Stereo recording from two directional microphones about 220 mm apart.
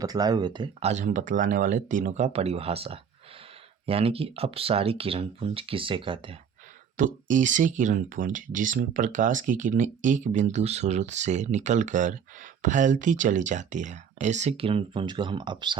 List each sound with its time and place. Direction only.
0.0 s speech: 15° right (ahead or behind)
6.9 s speech: 35° right (ahead or behind)